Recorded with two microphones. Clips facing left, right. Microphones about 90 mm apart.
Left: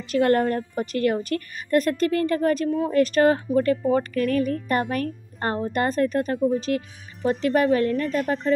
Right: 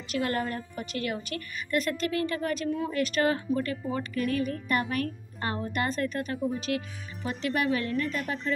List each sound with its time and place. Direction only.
0.2 s a woman's voice: 55° left (ahead or behind)
0.7 s speech: 45° left (ahead or behind)